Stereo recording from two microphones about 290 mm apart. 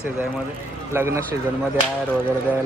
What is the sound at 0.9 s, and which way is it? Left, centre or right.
Speech, centre.